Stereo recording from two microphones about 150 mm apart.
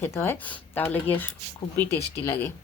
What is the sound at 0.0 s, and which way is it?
Speech, 15° left (ahead or behind).